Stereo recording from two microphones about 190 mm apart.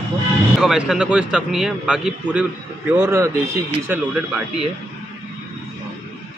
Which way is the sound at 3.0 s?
15° right (ahead or behind).